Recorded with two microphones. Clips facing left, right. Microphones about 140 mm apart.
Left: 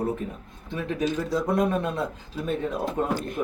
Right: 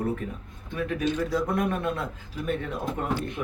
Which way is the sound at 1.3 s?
25° left (ahead or behind).